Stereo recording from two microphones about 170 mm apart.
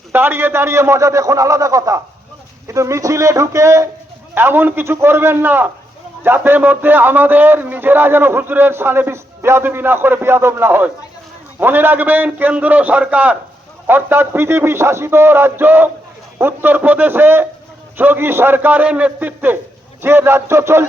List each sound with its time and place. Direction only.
0.1 s a man's voice: 15° right (ahead or behind)